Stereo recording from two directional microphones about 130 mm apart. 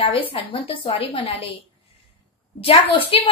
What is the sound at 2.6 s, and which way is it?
Speech, 45° left (ahead or behind).